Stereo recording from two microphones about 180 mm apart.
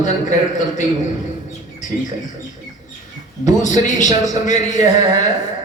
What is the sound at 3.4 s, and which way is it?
A man's voice, 45° left (ahead or behind).